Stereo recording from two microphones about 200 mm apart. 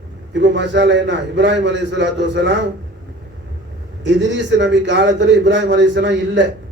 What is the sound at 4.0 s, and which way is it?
A man's voice, 60° right (ahead or behind).